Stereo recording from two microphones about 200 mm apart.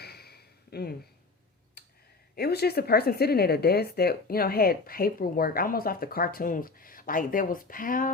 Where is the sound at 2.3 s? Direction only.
50° left (ahead or behind).